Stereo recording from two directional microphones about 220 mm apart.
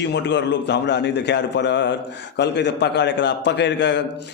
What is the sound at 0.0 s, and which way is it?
A man's voice, 55° left (ahead or behind).